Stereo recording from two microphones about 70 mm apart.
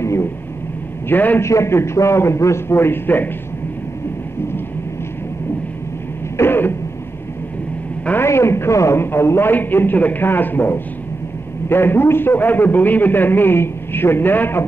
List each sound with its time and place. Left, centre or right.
0.0 s a sound: left
1.0 s a man's voice: left
1.4 s a man's voice: left
6.3 s throat clearing: left
8.2 s a man's voice: left